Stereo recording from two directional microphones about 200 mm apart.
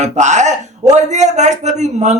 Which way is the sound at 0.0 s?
35° right (ahead or behind).